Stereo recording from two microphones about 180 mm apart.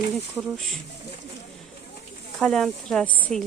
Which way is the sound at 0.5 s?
Centre (ahead or behind).